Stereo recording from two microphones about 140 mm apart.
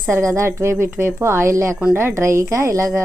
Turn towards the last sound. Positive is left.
turn(degrees=-20)  # may be behind; listen again after turning